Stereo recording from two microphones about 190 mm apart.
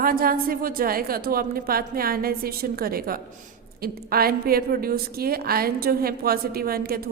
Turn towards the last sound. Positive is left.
turn(degrees=-50)  # may be behind; listen again after turning